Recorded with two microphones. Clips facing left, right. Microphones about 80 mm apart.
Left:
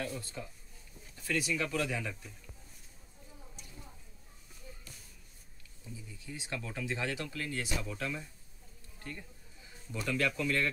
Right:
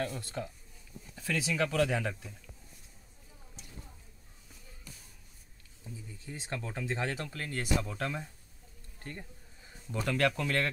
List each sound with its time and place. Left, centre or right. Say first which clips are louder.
0.2 s speech: right 5 dB; right
1.1 s speech: right 1 dB; right
5.9 s speech: right 1 dB; right
10.0 s speech: right 2 dB; right